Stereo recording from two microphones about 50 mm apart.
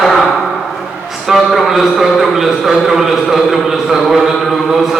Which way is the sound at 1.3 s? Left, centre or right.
Centre.